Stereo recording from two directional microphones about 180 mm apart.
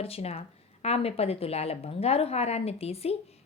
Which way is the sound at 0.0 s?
35° left (ahead or behind).